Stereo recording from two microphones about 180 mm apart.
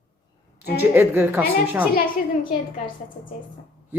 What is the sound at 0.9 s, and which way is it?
Speech, 10° right (ahead or behind).